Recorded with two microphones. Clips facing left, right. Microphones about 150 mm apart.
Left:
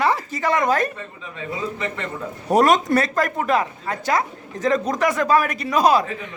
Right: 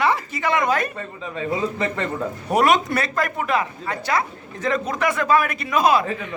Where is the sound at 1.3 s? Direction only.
35° right (ahead or behind).